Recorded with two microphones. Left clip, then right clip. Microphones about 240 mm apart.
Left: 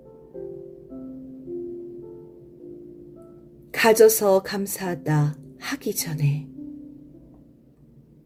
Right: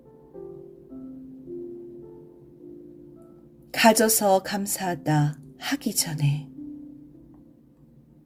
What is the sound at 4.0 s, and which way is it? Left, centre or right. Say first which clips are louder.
A woman's voice: left 5 dB; right.